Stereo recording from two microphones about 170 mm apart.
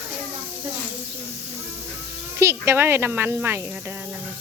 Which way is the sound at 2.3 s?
15° right (ahead or behind).